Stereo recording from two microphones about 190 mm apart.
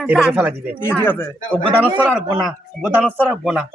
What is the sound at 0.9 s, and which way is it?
Speech, 10° left (ahead or behind).